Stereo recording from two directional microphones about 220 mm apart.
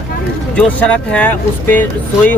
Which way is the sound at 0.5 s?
5° left (ahead or behind).